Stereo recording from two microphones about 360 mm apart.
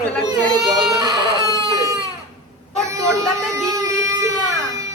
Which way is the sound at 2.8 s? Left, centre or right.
Centre.